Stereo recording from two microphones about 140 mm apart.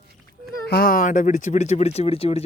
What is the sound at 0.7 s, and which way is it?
Speech, 85° left.